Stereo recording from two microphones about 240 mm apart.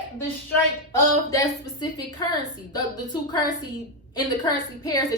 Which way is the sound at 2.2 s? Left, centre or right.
Centre.